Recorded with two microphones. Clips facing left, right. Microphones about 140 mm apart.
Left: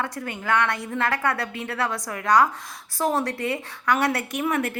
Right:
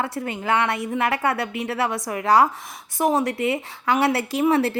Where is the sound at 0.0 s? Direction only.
25° right (ahead or behind).